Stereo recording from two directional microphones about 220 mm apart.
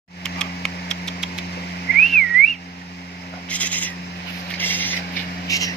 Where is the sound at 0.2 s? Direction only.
5° left (ahead or behind).